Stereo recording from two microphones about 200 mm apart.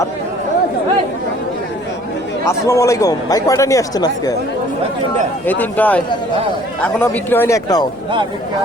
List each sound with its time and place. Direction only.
2.5 s speech: 15° left (ahead or behind)
5.5 s speech: 10° left (ahead or behind)